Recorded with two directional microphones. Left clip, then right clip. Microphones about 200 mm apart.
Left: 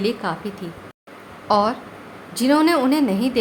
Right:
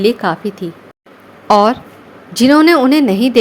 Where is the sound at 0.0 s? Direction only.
30° right (ahead or behind).